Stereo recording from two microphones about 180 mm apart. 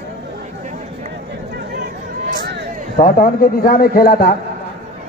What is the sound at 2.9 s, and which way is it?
A man's voice, 50° left (ahead or behind).